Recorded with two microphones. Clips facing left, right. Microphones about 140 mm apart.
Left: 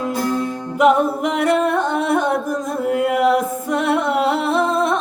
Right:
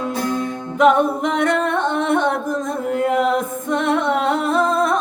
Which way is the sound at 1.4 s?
5° left (ahead or behind).